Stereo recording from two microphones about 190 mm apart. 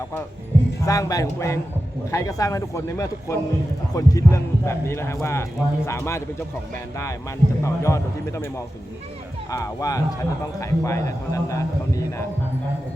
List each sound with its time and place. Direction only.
0.9 s a man's voice: 20° left (ahead or behind)